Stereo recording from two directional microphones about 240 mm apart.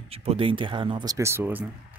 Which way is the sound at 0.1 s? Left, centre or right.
Right.